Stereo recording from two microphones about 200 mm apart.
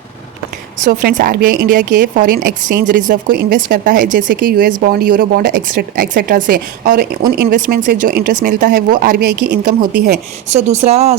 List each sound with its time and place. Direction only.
0.9 s speech: 40° right (ahead or behind)
8.6 s speech: 50° right (ahead or behind); by 11.2 s 35° right (ahead or behind)